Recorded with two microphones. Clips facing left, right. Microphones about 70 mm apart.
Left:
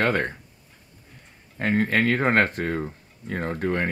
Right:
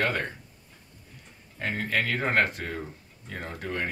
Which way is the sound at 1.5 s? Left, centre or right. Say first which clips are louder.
Left 7 dB; left.